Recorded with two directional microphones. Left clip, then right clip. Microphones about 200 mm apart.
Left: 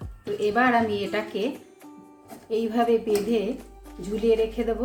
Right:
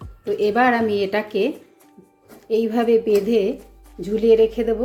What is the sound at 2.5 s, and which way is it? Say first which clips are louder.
A woman's voice: right 5 dB; 30° right (ahead or behind).